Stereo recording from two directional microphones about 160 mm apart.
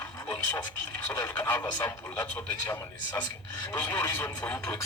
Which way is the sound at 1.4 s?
15° left (ahead or behind).